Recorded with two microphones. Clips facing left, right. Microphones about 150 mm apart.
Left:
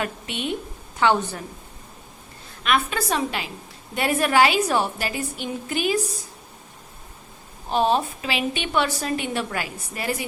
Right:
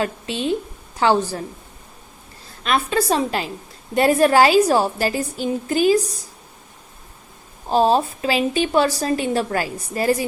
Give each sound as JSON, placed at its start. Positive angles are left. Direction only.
{"t": 0.0, "sound": "a woman's voice", "side_deg": -30}
{"t": 2.6, "sound": "a woman's voice", "side_deg": -35}
{"t": 7.7, "sound": "a woman's voice", "side_deg": -35}